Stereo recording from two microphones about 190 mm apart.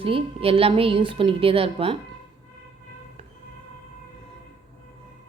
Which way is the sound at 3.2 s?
30° right (ahead or behind).